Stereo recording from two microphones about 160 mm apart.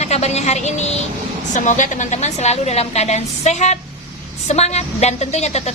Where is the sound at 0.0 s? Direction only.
45° left (ahead or behind).